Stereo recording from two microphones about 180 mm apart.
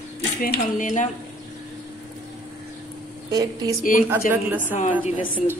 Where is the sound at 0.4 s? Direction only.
45° left (ahead or behind).